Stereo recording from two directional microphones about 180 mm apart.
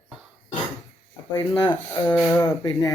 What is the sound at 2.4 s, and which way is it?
Rub, 20° left (ahead or behind).